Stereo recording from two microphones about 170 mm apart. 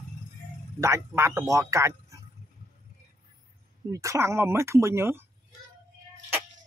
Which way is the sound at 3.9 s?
20° right (ahead or behind).